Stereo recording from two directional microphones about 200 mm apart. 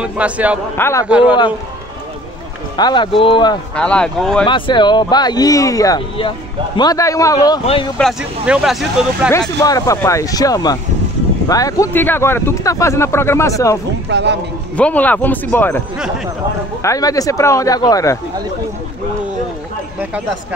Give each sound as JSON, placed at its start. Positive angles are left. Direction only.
{"t": 0.0, "sound": "a man's voice", "side_deg": -5}
{"t": 0.7, "sound": "speech", "side_deg": 10}
{"t": 1.0, "sound": "speech", "side_deg": -5}
{"t": 2.8, "sound": "speech", "side_deg": 25}
{"t": 3.7, "sound": "speech", "side_deg": 5}
{"t": 4.5, "sound": "speech", "side_deg": 25}
{"t": 8.0, "sound": "speech", "side_deg": -5}
{"t": 9.6, "sound": "speech", "side_deg": 15}
{"t": 14.0, "sound": "a man's voice", "side_deg": -60}
{"t": 14.8, "sound": "speech", "side_deg": 5}
{"t": 16.8, "sound": "speech", "side_deg": 15}